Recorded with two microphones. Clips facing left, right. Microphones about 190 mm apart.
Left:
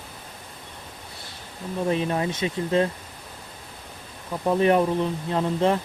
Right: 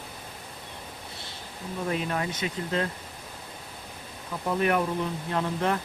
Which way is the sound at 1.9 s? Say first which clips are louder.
Left 5 dB; 25° left (ahead or behind).